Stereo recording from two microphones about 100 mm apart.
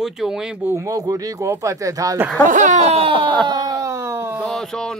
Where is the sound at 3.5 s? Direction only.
40° right (ahead or behind); by 4.4 s 25° right (ahead or behind).